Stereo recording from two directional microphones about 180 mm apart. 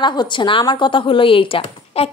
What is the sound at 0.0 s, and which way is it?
Speech, 25° left (ahead or behind).